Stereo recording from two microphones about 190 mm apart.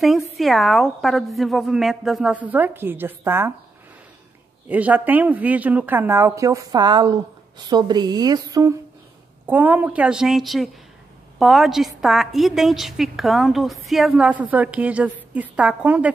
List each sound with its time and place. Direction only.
0.4 s a woman's voice: centre (ahead or behind)
4.6 s a woman's voice: 10° right (ahead or behind)